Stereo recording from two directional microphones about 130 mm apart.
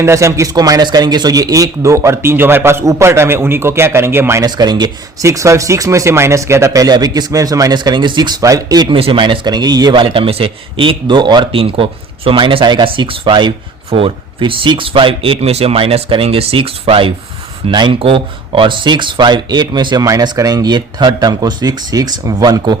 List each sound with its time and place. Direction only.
0.0 s speech: 20° right (ahead or behind)
4.4 s speech: 35° right (ahead or behind)
9.0 s speech: 40° right (ahead or behind)